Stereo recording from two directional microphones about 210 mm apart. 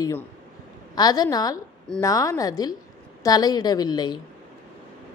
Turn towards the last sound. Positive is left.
turn(degrees=20)  # may be behind; listen again after turning